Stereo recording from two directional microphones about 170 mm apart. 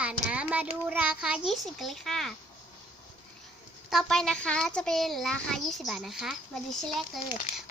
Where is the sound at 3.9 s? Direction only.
Centre (ahead or behind).